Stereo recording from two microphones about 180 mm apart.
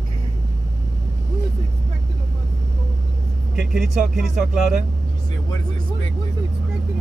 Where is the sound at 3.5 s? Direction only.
5° right (ahead or behind).